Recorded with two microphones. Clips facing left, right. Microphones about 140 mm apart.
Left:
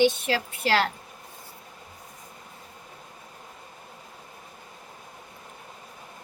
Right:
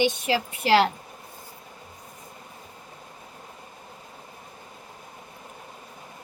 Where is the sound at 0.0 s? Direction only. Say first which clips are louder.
Left 1 dB; 15° right (ahead or behind).